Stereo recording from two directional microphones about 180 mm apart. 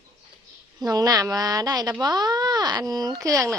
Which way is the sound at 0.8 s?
20° right (ahead or behind).